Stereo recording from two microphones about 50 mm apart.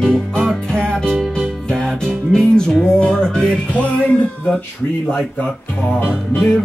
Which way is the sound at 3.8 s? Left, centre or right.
Left.